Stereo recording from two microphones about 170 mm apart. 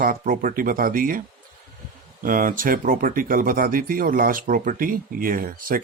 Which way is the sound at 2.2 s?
55° right (ahead or behind).